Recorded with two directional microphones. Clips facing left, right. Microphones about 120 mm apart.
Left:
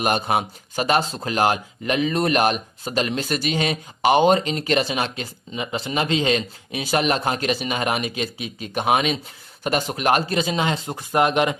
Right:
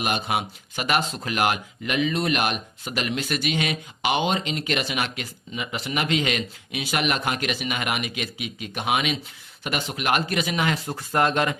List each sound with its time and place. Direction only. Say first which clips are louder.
0.0 s speech: left 4 dB; 40° left (ahead or behind); by 11.5 s 15° left (ahead or behind)